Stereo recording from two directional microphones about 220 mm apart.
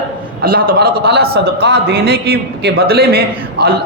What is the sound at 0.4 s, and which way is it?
A man's voice, 40° right (ahead or behind).